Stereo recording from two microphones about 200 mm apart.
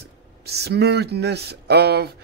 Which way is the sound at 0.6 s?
55° right (ahead or behind).